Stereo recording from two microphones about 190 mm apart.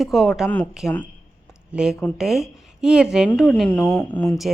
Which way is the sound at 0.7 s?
Centre (ahead or behind).